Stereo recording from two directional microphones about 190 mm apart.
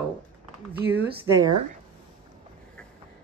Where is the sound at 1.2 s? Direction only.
15° right (ahead or behind).